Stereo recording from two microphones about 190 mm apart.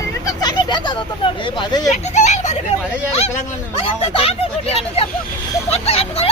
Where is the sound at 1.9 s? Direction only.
40° left (ahead or behind).